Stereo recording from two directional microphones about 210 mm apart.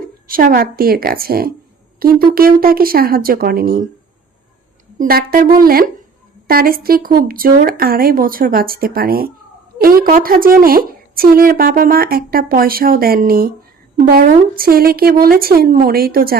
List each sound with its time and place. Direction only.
0.3 s a woman's voice: 45° right (ahead or behind)
4.9 s a woman's voice: 45° right (ahead or behind)